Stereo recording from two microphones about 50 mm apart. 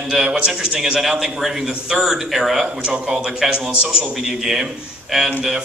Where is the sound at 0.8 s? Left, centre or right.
Centre.